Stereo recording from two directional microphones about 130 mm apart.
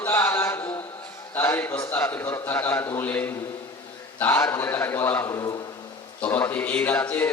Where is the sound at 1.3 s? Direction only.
15° left (ahead or behind).